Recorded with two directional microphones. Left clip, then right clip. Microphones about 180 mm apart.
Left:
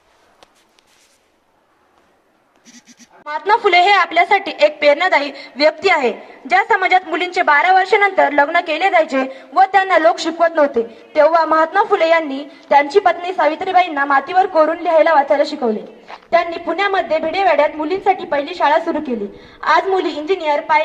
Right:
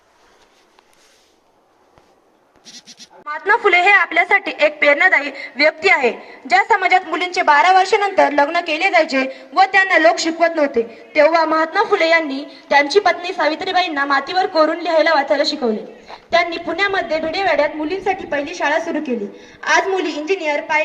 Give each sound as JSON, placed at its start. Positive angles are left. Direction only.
{"t": 3.2, "sound": "a woman's voice", "side_deg": 65}
{"t": 20.0, "sound": "a woman's voice", "side_deg": 90}